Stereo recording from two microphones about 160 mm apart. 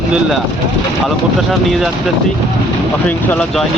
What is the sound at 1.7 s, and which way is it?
Speech, centre (ahead or behind).